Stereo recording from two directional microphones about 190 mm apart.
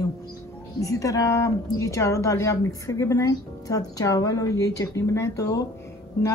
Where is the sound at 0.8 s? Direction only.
15° left (ahead or behind).